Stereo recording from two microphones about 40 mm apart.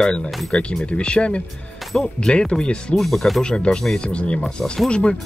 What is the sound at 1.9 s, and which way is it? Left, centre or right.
Speech, centre.